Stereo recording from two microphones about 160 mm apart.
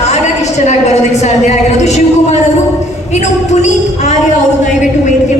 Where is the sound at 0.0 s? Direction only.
45° left (ahead or behind).